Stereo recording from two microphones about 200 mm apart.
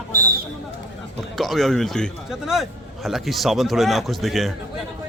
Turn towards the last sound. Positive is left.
turn(degrees=0)  # may be behind; listen again after turning